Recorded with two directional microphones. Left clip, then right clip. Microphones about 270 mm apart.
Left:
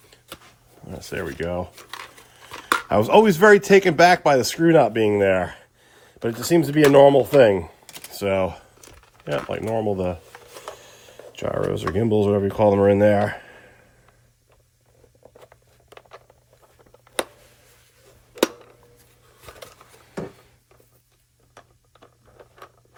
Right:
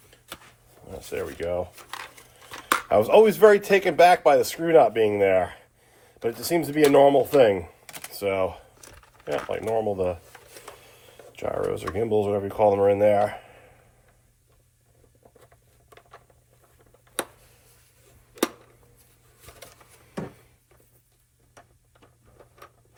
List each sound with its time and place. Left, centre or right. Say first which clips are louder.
0.9 s speech: left 2 dB; left
2.5 s a sound: left 2 dB; centre
2.9 s speech: left 1 dB; left
7.9 s computer keyboard: even; centre
8.1 s speech: left 3 dB; left
8.8 s a sound: left 1 dB; centre
9.5 s speech: even; left